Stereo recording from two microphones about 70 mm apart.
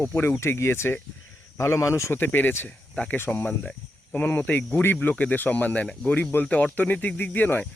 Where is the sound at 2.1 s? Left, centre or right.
Left.